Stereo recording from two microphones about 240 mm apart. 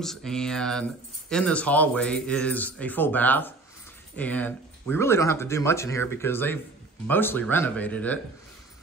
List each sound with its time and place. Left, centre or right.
0.0 s speech: centre